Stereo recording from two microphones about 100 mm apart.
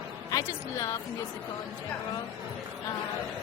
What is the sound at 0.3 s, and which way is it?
Speech, 35° left (ahead or behind).